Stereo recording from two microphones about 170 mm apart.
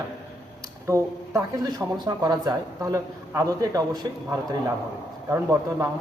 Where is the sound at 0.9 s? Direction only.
20° right (ahead or behind).